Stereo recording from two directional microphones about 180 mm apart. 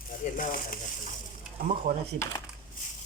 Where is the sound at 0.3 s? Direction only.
50° left (ahead or behind).